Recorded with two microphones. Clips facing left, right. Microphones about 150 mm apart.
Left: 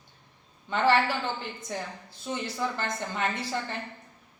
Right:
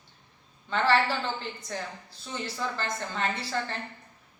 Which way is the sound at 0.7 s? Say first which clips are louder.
Left 1 dB; 15° left (ahead or behind).